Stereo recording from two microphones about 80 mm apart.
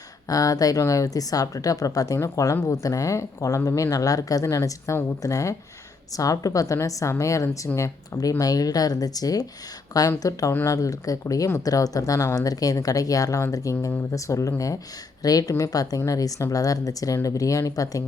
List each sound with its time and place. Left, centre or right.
0.3 s speech: left